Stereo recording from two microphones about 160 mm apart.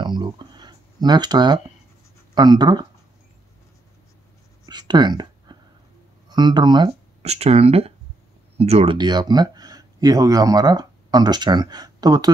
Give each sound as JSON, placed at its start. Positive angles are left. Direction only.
{"t": 0.0, "sound": "a sound", "side_deg": -30}
{"t": 2.3, "sound": "speech", "side_deg": -25}
{"t": 4.6, "sound": "a sound", "side_deg": -25}
{"t": 6.2, "sound": "speech", "side_deg": -25}
{"t": 7.2, "sound": "speech", "side_deg": -40}
{"t": 8.9, "sound": "speech", "side_deg": -25}